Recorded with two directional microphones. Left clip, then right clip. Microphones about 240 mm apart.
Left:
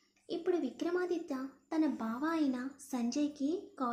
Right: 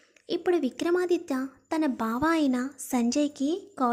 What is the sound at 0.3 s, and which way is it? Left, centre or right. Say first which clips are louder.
Speech: right 8 dB; right.